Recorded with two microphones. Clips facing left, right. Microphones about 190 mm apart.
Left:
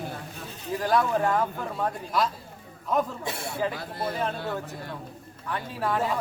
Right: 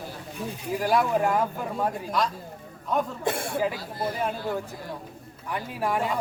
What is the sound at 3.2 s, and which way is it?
Speech, 50° right (ahead or behind).